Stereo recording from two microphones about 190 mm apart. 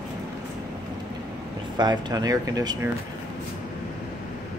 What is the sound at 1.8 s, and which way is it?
Speech, 20° right (ahead or behind).